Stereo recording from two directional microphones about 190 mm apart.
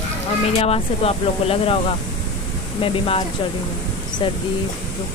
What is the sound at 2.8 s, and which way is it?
Speech, 30° left (ahead or behind).